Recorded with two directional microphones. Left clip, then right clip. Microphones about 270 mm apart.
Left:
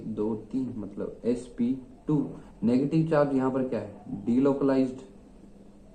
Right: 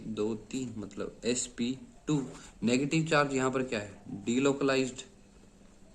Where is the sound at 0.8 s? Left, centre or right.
Right.